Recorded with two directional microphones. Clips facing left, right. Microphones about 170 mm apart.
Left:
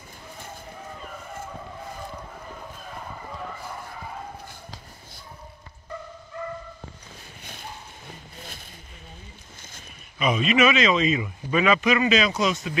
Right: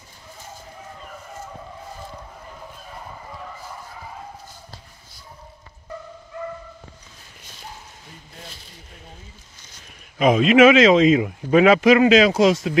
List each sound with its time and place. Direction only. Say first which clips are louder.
10.1 s speech: right 8 dB; 90° right